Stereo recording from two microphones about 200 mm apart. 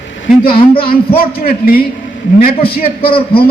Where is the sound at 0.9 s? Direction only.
50° left (ahead or behind).